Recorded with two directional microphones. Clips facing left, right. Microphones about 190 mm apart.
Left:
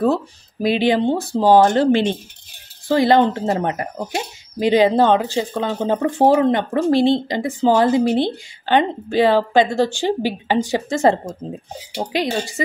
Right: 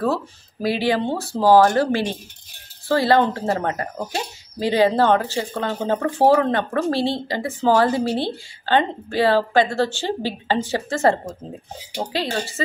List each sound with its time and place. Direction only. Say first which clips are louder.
0.0 s speech: left 4 dB; 20° left (ahead or behind)